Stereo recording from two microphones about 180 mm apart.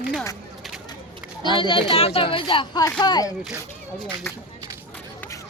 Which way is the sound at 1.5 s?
25° left (ahead or behind).